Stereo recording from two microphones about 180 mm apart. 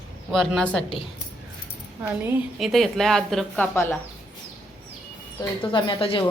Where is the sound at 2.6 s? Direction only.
Centre (ahead or behind).